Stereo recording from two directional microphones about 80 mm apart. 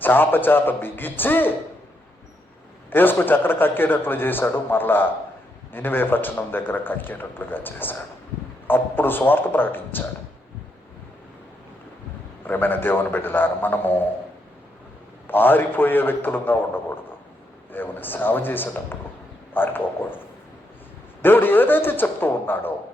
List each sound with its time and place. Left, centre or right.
0.0 s speech: left
2.9 s speech: left
12.5 s speech: left
15.3 s speech: left